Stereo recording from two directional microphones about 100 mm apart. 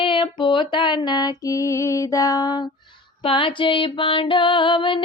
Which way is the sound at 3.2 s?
60° left (ahead or behind).